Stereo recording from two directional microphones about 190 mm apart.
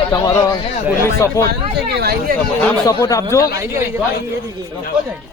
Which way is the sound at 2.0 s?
55° right (ahead or behind).